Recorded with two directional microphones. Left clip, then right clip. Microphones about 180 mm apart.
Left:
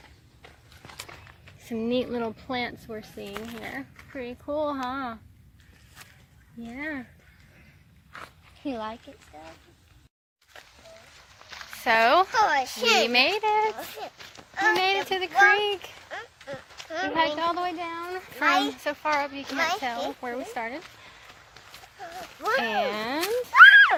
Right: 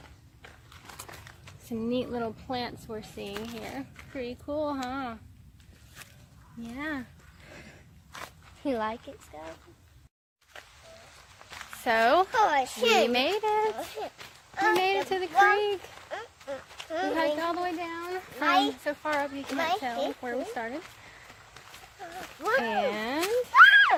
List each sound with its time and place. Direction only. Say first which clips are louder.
1.7 s speech: left 4 dB; 35° left (ahead or behind); by 5.1 s 15° left (ahead or behind)
6.7 s speech: left 1 dB; 20° left (ahead or behind)
8.6 s a child's voice: right 3 dB; 15° right (ahead or behind)
9.3 s speech: right 2 dB; 30° right (ahead or behind)
10.5 s a sound: even; 10° left (ahead or behind)
11.6 s speech: left 3 dB; centre (ahead or behind)
12.3 s a child's voice: left 2 dB; 15° right (ahead or behind)
13.0 s a child's voice: left 3 dB; centre (ahead or behind); by 19.1 s 15° left (ahead or behind)
19.1 s a child's voice: left 3 dB; 5° left (ahead or behind)
22.0 s a sound: left 2 dB; centre (ahead or behind)
22.6 s speech: left 2 dB; 20° left (ahead or behind)
23.2 s a sound: left 4 dB; centre (ahead or behind)